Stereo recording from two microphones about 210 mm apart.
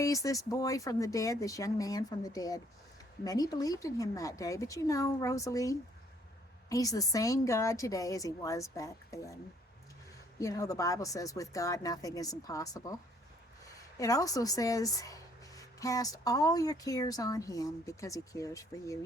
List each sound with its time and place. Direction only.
0.0 s speech: 15° left (ahead or behind)
10.4 s speech: 15° left (ahead or behind)